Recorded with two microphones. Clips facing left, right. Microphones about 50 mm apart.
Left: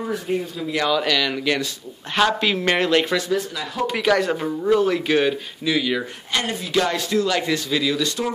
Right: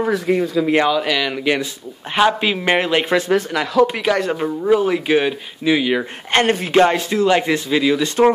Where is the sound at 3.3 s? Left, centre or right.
Right.